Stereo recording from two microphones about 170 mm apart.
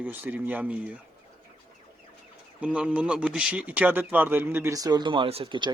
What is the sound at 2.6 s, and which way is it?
Speech, 5° right (ahead or behind).